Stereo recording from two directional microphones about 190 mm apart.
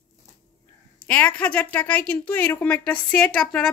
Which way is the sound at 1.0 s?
10° left (ahead or behind).